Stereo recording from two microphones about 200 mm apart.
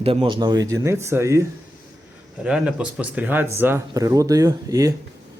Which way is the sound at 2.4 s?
5° right (ahead or behind).